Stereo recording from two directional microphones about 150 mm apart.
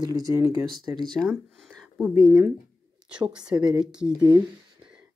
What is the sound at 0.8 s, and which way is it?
Speech, 30° right (ahead or behind).